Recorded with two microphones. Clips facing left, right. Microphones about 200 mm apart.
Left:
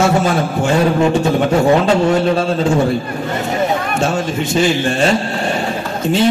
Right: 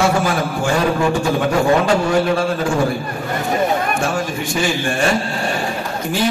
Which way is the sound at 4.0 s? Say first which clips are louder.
Left 3 dB; 25° left (ahead or behind).